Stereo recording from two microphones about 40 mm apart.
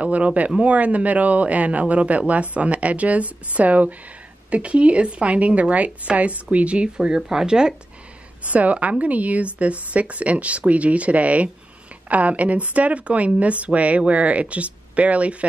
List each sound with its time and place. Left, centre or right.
0.0 s a man's voice: right
8.5 s a man's voice: right